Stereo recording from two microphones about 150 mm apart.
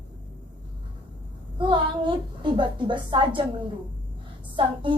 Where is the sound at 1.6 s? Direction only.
35° right (ahead or behind).